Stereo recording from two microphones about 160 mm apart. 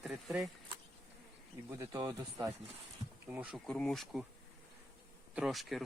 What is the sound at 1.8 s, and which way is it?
Speech, 20° right (ahead or behind).